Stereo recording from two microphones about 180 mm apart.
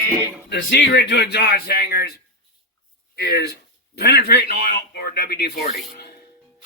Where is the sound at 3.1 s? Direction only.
65° left (ahead or behind).